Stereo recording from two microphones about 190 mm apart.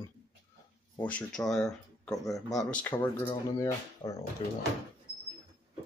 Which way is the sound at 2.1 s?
20° left (ahead or behind).